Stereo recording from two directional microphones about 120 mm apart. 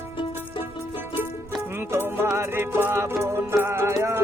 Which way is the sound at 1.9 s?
20° right (ahead or behind).